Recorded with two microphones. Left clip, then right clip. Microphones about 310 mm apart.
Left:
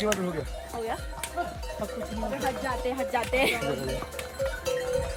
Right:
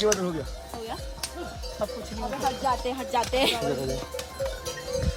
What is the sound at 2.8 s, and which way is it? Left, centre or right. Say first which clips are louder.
Speech: right 1 dB; centre.